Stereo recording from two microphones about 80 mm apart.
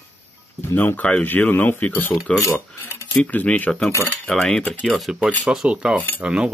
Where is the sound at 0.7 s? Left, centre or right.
Left; by 5.2 s centre.